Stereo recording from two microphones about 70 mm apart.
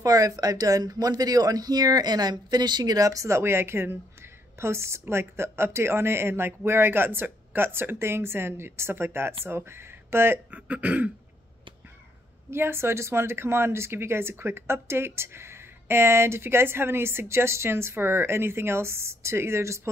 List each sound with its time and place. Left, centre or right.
0.0 s speech: right
3.3 s speech: right
10.5 s speech: centre
12.4 s speech: right